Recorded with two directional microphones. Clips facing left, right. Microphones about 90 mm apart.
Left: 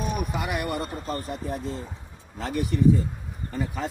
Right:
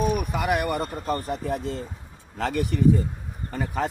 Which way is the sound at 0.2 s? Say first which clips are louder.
Right 4 dB; 60° right (ahead or behind).